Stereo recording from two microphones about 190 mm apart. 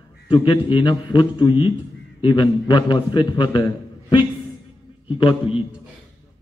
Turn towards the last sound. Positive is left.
turn(degrees=30)  # may be behind; listen again after turning